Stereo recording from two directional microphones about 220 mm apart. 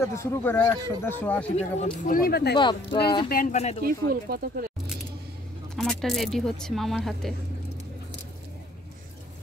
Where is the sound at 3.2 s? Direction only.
40° left (ahead or behind).